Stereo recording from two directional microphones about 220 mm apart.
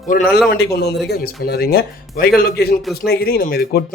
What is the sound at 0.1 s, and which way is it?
A man's voice, 40° left (ahead or behind).